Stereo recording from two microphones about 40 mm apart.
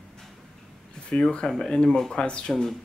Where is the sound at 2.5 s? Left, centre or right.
Centre.